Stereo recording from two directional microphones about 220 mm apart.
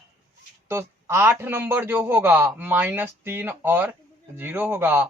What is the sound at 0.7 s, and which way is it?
A man's voice, 10° right (ahead or behind).